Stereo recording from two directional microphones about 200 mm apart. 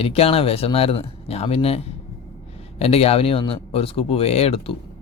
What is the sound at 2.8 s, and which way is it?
Speech, 30° left (ahead or behind).